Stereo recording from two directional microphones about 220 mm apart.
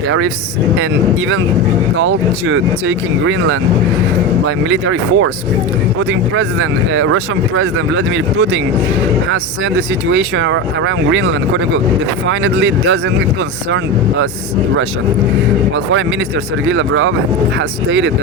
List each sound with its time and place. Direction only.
2.0 s speech: 60° right (ahead or behind)
16.6 s speech: 60° right (ahead or behind)